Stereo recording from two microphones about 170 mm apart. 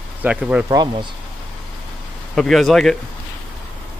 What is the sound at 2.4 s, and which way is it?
Speech, centre (ahead or behind).